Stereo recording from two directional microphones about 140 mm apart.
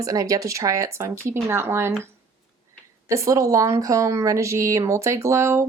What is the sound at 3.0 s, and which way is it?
Speech, 20° right (ahead or behind).